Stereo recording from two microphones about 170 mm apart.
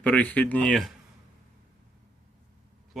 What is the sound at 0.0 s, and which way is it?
Speech, 10° left (ahead or behind).